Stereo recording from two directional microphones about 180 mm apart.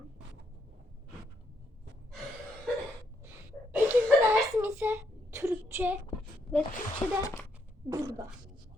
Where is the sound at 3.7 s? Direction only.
10° right (ahead or behind).